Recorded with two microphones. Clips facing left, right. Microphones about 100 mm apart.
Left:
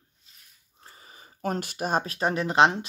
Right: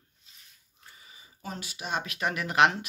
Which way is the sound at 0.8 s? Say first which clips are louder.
Left 4 dB; 40° left (ahead or behind).